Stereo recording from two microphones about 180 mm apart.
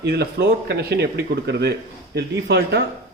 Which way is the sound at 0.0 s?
65° right (ahead or behind).